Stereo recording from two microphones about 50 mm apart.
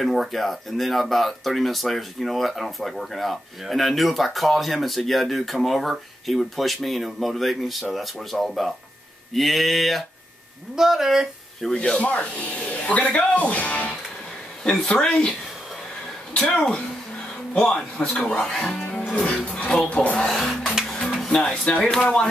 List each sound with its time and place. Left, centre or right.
0.0 s speech: centre
10.8 s speech: centre
11.6 s speech: centre
12.0 s speech: left
14.6 s speech: centre
16.3 s speech: centre
17.9 s speech: left
20.2 s speech: centre
21.6 s speech: left